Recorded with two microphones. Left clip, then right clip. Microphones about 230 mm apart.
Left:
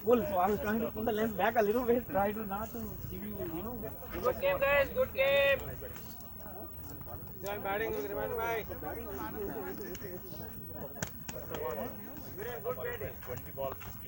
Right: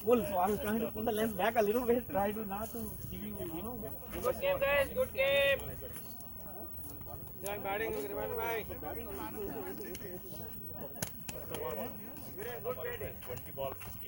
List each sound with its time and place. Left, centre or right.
0.1 s speech: right
4.3 s speech: centre
7.4 s speech: right
11.0 s a sound: right
12.4 s speech: right